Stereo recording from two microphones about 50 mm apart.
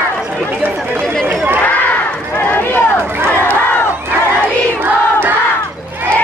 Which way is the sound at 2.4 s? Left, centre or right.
Left.